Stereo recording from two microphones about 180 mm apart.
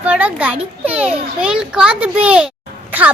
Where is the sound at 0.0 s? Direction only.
10° right (ahead or behind).